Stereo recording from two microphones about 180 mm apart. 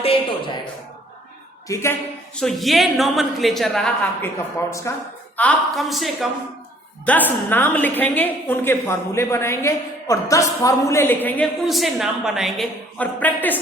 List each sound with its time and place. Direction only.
0.0 s a man's voice: 30° left (ahead or behind)
1.6 s a woman's voice: 15° left (ahead or behind)
2.4 s a woman's voice: centre (ahead or behind)
5.4 s a woman's voice: 5° left (ahead or behind)
11.6 s a woman's voice: centre (ahead or behind)